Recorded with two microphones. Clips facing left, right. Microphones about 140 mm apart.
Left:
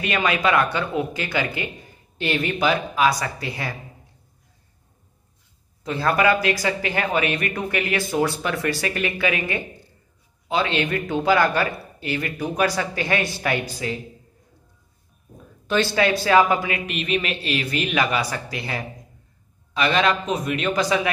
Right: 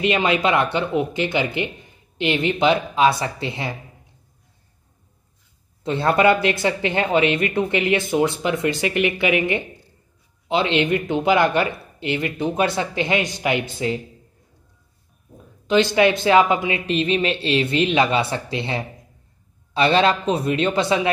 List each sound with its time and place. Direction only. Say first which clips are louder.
0.0 s speech: right 3 dB; 25° right (ahead or behind)
5.9 s speech: right 3 dB; 25° right (ahead or behind)
15.6 s speech: right 4 dB; 20° right (ahead or behind)